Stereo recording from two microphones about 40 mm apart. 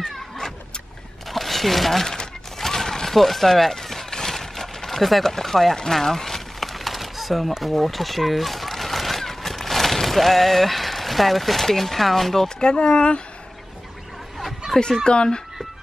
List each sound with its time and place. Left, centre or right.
1.3 s speech: centre
2.6 s a sound: centre
7.6 s speech: centre
12.4 s speech: left
14.7 s speech: centre
15.0 s speech: left